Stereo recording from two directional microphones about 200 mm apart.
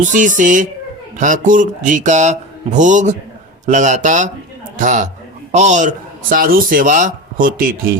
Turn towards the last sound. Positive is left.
turn(degrees=-45)  # may be behind; listen again after turning